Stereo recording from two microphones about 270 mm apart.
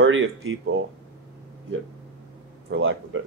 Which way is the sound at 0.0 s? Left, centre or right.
Right.